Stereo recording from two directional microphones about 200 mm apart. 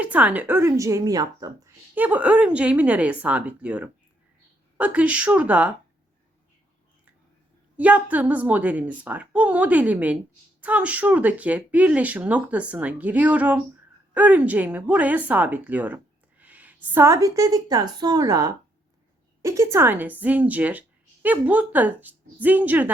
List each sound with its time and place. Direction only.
0.0 s speech: 5° right (ahead or behind)
7.8 s a woman's voice: 5° right (ahead or behind)